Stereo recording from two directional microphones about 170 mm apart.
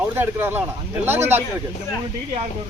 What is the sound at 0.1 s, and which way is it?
Speech, 15° right (ahead or behind).